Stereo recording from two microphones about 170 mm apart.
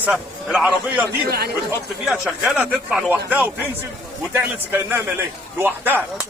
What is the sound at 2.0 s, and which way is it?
Speech, centre (ahead or behind).